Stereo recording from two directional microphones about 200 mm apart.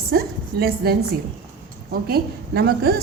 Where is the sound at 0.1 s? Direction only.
50° right (ahead or behind).